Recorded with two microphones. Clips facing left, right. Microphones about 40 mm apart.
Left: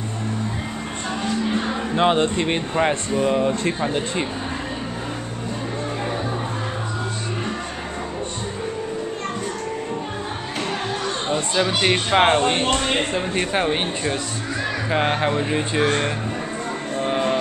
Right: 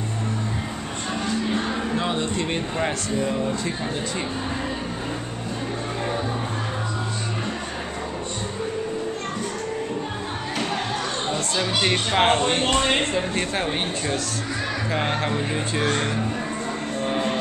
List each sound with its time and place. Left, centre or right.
2.0 s speech: left
2.3 s speech: left
3.2 s speech: left
11.2 s speech: left
17.0 s music: centre